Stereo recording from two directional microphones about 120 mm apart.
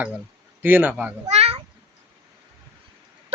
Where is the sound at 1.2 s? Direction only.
60° right (ahead or behind).